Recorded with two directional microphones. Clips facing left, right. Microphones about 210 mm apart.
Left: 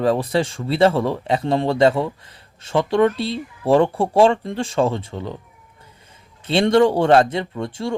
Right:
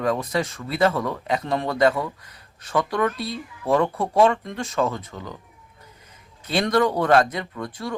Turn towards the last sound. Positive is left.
turn(degrees=25)  # may be behind; listen again after turning